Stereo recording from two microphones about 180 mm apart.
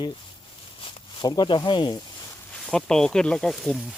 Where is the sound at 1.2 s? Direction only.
25° left (ahead or behind).